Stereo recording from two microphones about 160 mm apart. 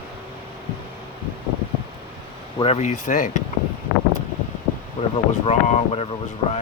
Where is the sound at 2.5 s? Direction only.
40° left (ahead or behind).